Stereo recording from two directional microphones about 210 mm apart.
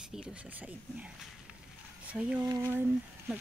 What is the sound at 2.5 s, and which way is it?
Speech, 15° right (ahead or behind).